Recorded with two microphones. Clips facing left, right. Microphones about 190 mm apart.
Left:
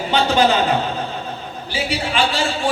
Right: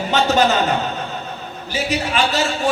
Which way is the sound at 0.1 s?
45° right (ahead or behind).